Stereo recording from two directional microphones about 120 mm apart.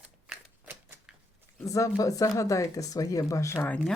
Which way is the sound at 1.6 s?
25° left (ahead or behind).